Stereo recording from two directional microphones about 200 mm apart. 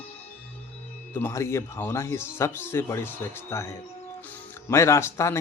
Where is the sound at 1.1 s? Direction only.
10° left (ahead or behind).